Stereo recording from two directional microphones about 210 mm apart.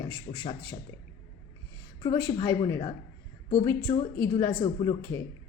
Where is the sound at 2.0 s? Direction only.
20° left (ahead or behind).